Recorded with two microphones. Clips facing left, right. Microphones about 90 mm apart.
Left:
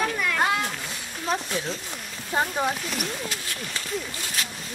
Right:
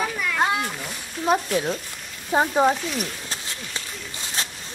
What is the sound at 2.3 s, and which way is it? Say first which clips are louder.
Speech: right 6 dB; 25° right (ahead or behind).